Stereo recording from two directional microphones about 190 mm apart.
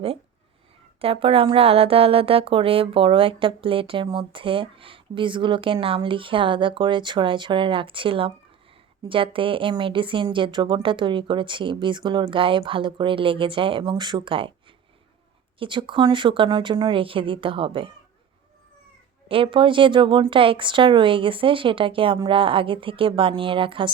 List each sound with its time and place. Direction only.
1.0 s speech: 30° right (ahead or behind)
15.5 s speech: 25° right (ahead or behind)
19.3 s speech: 25° right (ahead or behind)